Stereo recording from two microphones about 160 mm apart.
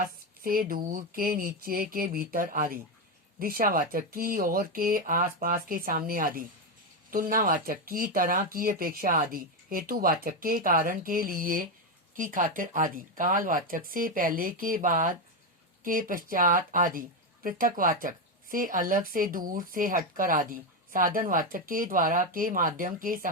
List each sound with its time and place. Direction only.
0.4 s speech: 65° right (ahead or behind)